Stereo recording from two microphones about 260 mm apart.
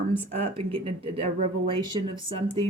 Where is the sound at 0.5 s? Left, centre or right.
Right.